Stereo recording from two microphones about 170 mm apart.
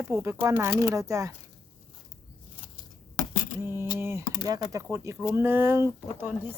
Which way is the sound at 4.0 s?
15° right (ahead or behind).